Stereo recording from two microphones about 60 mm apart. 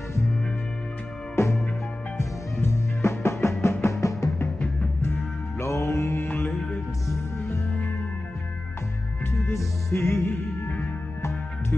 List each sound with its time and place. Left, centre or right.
1.3 s music: left
2.6 s music: left
5.0 s music: left
6.2 s music: left
9.3 s music: left